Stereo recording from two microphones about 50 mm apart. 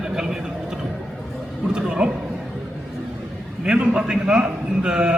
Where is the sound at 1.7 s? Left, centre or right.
Centre.